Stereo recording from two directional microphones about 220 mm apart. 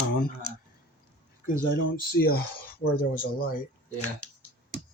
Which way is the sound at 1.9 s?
45° left (ahead or behind).